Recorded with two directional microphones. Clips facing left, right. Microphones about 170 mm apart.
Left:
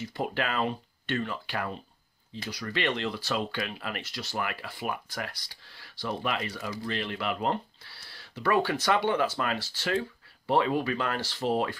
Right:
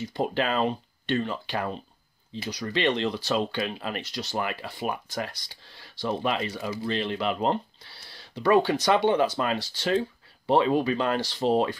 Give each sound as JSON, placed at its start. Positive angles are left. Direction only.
{"t": 0.0, "sound": "speech", "side_deg": -20}